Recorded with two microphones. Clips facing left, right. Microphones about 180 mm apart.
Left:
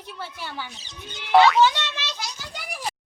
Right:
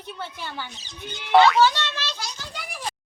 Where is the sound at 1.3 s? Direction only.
Centre (ahead or behind).